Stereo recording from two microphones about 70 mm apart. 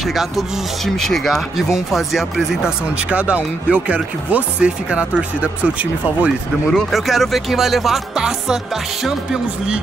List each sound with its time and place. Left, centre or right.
0.0 s speech: centre
3.1 s speech: centre
6.7 s speech: centre